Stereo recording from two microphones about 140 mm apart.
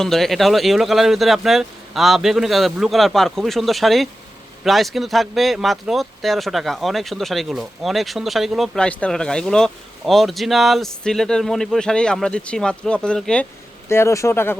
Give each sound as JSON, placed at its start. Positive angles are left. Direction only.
{"t": 0.0, "sound": "speech", "side_deg": 0}
{"t": 13.8, "sound": "speech", "side_deg": 20}